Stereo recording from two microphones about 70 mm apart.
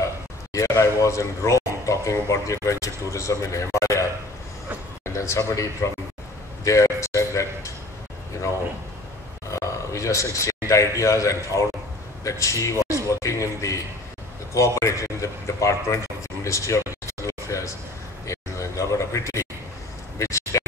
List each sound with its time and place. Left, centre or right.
0.0 s speech: left
5.1 s speech: left
9.5 s speech: left
16.4 s a sound: left